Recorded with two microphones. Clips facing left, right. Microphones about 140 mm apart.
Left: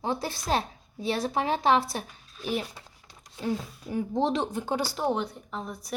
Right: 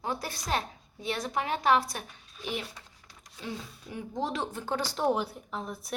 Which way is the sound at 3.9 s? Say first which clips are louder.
Left 7 dB; 30° left (ahead or behind).